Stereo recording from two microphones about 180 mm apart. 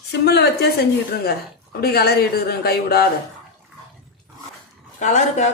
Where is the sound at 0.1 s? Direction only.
65° left (ahead or behind).